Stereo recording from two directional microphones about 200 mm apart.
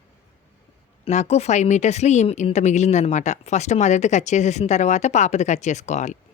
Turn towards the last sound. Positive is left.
turn(degrees=35)  # may be behind; listen again after turning